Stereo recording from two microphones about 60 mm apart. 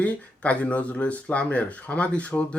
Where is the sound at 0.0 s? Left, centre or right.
Left.